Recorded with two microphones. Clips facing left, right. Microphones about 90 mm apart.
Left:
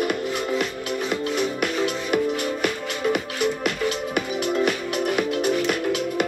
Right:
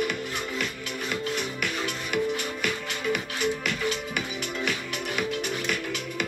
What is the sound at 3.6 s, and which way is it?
Music, 45° left (ahead or behind).